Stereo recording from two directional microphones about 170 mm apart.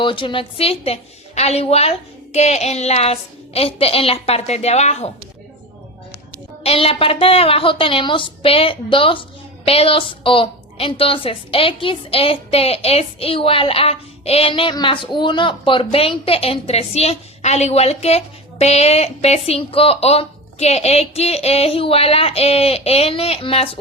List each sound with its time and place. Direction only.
0.0 s a woman's voice: 30° left (ahead or behind)
6.6 s a woman's voice: 35° left (ahead or behind)